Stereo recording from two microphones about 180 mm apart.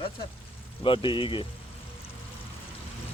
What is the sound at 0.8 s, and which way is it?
Speech, 30° left (ahead or behind).